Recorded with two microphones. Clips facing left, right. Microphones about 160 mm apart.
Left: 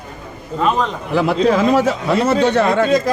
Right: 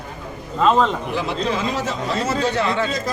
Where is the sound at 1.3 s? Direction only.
70° left (ahead or behind).